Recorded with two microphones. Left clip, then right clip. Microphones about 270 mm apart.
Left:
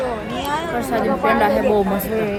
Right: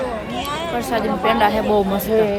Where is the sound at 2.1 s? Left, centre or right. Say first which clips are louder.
Right 5 dB; right.